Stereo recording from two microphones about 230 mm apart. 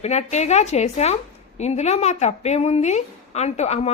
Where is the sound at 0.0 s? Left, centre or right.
Left.